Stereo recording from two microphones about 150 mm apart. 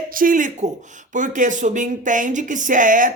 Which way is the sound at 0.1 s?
65° right (ahead or behind).